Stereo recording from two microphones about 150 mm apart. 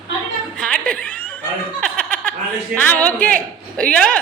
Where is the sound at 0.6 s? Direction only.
5° left (ahead or behind).